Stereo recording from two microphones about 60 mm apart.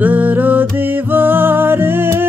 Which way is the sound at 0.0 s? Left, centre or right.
Right.